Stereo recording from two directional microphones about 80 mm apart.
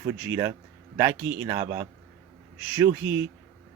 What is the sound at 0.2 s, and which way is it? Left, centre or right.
Speech, right.